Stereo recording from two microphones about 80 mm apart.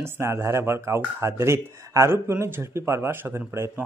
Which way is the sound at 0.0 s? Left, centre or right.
Right.